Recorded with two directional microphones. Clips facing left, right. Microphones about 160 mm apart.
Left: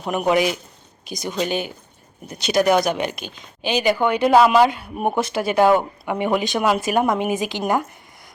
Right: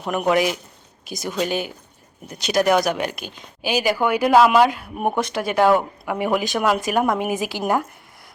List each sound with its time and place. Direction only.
0.1 s speech: centre (ahead or behind)